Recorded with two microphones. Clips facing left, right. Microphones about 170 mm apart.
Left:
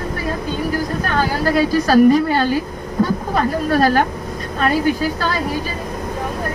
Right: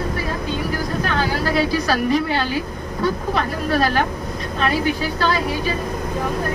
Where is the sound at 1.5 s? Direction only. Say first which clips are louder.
Left 9 dB; 45° left (ahead or behind).